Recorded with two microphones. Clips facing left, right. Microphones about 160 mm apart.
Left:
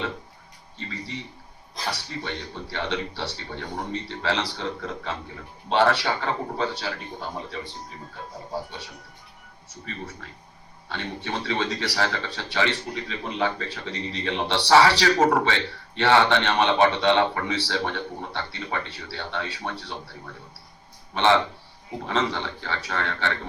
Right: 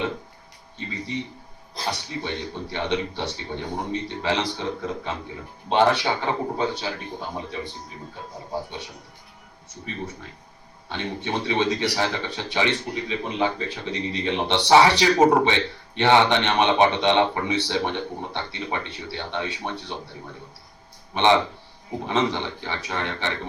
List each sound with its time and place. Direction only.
1.8 s speech: 20° right (ahead or behind)
10.8 s speech: 20° right (ahead or behind)
21.1 s speech: 15° right (ahead or behind)